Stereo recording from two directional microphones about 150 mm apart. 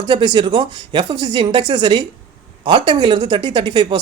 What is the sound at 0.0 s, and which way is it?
Speech, 30° right (ahead or behind).